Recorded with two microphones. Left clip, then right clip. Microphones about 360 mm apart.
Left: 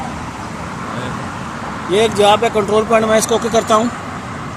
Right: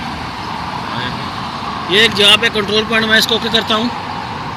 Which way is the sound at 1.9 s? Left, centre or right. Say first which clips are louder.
Right 2 dB; centre.